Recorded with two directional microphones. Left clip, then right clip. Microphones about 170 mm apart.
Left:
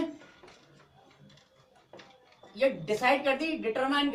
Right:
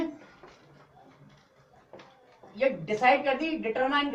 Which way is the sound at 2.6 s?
30° left (ahead or behind).